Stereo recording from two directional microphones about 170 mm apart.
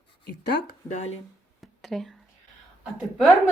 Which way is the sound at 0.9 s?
40° left (ahead or behind).